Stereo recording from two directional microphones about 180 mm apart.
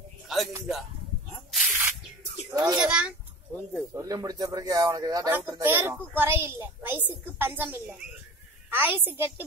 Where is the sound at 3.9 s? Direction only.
20° right (ahead or behind).